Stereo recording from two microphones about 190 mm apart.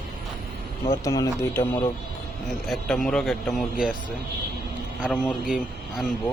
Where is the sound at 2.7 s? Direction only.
Centre (ahead or behind).